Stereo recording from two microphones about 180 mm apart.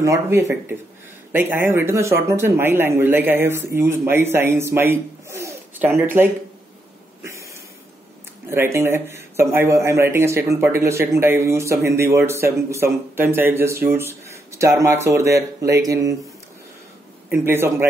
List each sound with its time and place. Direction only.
0.0 s a man's voice: 15° right (ahead or behind)
8.5 s a man's voice: 15° right (ahead or behind)
17.3 s a man's voice: 10° right (ahead or behind)